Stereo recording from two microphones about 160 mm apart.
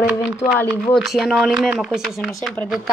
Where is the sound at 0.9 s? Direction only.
Centre (ahead or behind).